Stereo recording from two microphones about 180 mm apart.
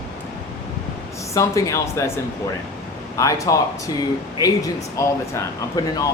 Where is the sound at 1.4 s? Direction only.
15° left (ahead or behind).